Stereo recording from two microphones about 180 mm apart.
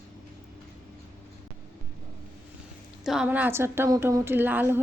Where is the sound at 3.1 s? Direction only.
5° right (ahead or behind).